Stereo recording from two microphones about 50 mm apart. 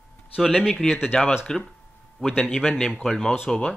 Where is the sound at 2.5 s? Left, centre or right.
Centre.